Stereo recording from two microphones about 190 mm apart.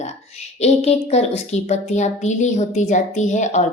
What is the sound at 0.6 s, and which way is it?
A woman's voice, 35° left (ahead or behind).